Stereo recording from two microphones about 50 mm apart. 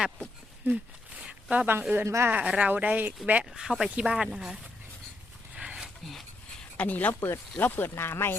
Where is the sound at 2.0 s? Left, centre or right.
Right.